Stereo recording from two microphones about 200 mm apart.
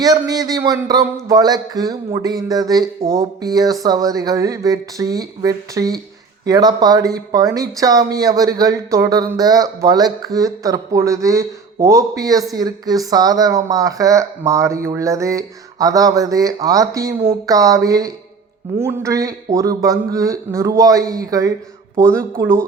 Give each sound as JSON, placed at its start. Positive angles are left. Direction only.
{"t": 0.0, "sound": "a man's voice", "side_deg": -20}